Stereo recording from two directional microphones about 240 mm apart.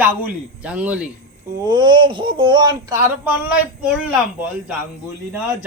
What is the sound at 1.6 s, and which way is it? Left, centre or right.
Speech, centre.